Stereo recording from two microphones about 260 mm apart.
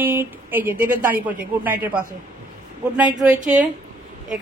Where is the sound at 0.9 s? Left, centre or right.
Right.